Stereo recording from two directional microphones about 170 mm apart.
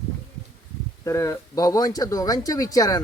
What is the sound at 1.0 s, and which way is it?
Speech, 15° left (ahead or behind).